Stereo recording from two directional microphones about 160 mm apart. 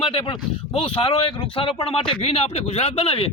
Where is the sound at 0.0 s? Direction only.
35° left (ahead or behind).